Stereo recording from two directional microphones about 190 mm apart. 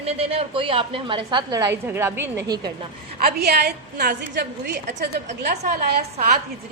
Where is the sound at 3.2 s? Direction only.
60° right (ahead or behind).